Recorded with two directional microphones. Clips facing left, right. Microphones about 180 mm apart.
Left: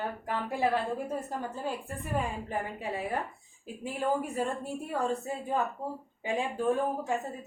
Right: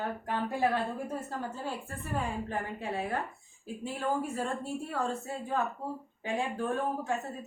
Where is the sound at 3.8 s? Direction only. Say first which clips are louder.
Left 2 dB; 15° left (ahead or behind).